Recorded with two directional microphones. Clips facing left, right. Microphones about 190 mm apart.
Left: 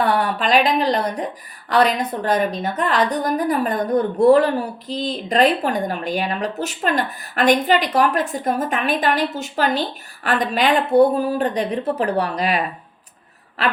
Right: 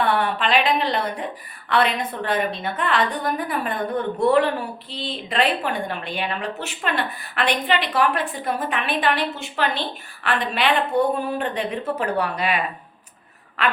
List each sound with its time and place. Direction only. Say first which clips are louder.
0.0 s a woman's voice: left 2 dB; 40° left (ahead or behind)